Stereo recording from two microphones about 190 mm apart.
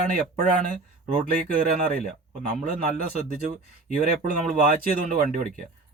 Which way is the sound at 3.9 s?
45° right (ahead or behind).